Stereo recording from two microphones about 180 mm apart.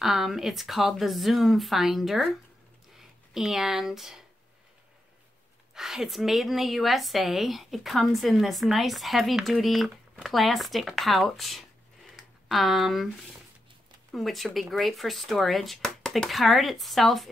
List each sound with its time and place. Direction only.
0.0 s a woman's voice: centre (ahead or behind)
3.3 s a woman's voice: centre (ahead or behind)
5.8 s a woman's voice: centre (ahead or behind)
14.1 s a woman's voice: centre (ahead or behind)